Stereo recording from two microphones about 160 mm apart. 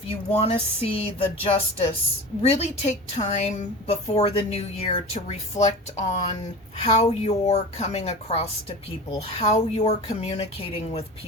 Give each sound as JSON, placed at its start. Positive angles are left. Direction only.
{"t": 0.1, "sound": "speech", "side_deg": 40}
{"t": 2.4, "sound": "a woman's voice", "side_deg": 45}